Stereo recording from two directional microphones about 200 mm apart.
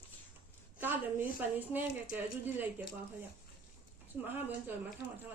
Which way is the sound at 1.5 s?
10° right (ahead or behind).